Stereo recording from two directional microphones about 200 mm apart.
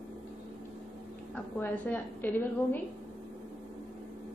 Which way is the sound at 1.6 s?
10° left (ahead or behind).